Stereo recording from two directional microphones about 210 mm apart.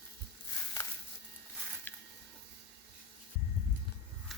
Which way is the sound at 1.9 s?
10° left (ahead or behind).